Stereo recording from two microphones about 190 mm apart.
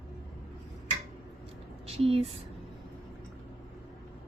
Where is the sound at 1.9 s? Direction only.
30° right (ahead or behind).